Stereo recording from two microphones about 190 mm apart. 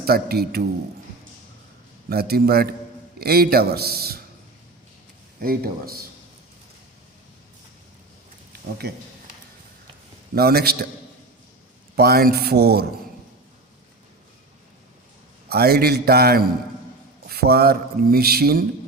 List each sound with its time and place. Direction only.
0.0 s speech: 55° right (ahead or behind)
2.0 s speech: 55° right (ahead or behind)
5.4 s a man's voice: 50° right (ahead or behind)
10.3 s speech: 55° right (ahead or behind)
11.9 s speech: 55° right (ahead or behind)
15.4 s speech: 55° right (ahead or behind)